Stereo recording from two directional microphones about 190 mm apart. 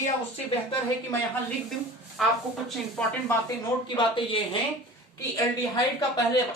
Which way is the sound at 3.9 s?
25° left (ahead or behind).